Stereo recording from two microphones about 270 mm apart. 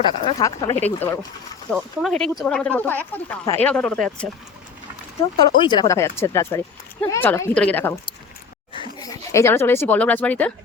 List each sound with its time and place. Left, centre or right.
0.3 s speech: centre
5.4 s speech: centre
9.0 s speech: centre